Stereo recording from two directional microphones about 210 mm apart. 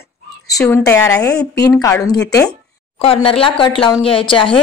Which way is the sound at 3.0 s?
25° left (ahead or behind).